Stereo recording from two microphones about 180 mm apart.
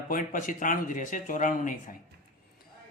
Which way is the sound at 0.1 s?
45° left (ahead or behind).